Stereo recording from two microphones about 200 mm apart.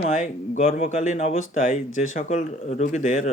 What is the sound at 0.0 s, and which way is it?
Speech, 35° left (ahead or behind).